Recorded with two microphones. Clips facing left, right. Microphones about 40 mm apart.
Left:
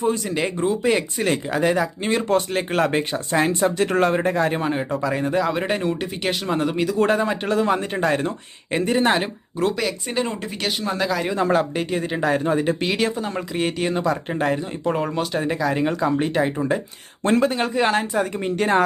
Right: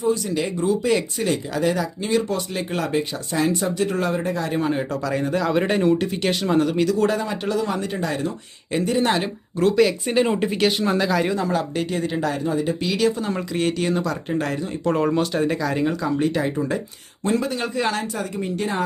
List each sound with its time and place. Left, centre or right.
0.0 s speech: left
4.6 s speech: centre
6.9 s speech: left
8.7 s speech: left
9.6 s speech: centre
11.3 s speech: left
11.7 s speech: centre
12.3 s speech: left
13.1 s speech: centre
14.8 s speech: centre
15.9 s speech: left
17.2 s speech: left
17.6 s speech: left
18.3 s speech: left